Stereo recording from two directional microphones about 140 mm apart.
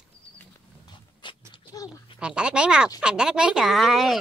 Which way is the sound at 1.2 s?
35° left (ahead or behind).